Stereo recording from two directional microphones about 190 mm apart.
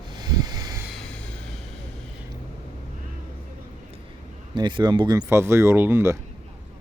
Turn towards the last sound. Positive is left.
turn(degrees=-15)  # may be behind; listen again after turning